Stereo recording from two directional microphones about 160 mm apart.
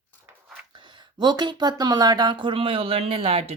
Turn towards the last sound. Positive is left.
turn(degrees=-40)  # may be behind; listen again after turning